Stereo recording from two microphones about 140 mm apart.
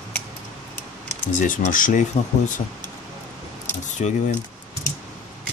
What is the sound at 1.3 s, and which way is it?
Speech, 70° left (ahead or behind).